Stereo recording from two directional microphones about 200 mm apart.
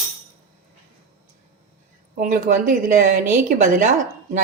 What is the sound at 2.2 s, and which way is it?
A woman's voice, 45° right (ahead or behind).